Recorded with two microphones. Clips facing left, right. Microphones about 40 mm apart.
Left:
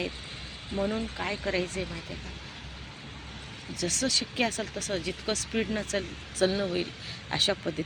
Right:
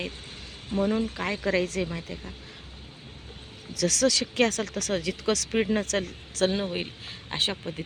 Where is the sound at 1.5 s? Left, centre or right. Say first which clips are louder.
Right 5 dB; right.